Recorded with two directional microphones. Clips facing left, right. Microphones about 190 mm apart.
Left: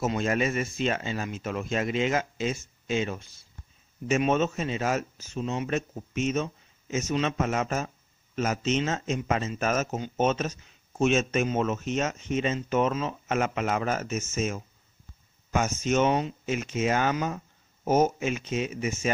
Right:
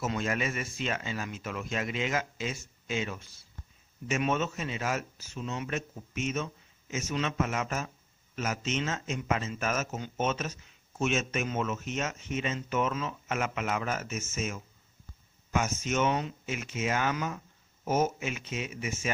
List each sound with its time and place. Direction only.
0.0 s speech: 30° left (ahead or behind)